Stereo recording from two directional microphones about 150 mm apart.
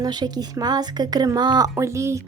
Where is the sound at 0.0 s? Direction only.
30° right (ahead or behind).